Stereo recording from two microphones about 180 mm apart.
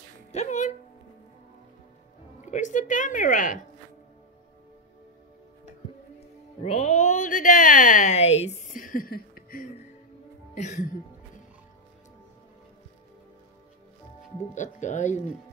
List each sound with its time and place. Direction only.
0.3 s speech: 40° left (ahead or behind)
2.4 s speech: 45° left (ahead or behind)
6.6 s speech: 35° left (ahead or behind); by 9.7 s 55° left (ahead or behind)
10.5 s music: 40° left (ahead or behind)
14.5 s speech: 40° left (ahead or behind)